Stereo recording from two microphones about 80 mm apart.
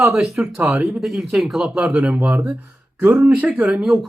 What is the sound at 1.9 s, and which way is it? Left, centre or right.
Speech, centre.